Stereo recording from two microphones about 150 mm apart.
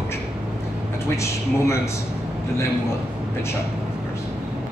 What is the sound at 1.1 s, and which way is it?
Speech, 20° left (ahead or behind).